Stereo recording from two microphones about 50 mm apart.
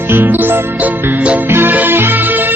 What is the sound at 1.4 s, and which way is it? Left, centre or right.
Music, right.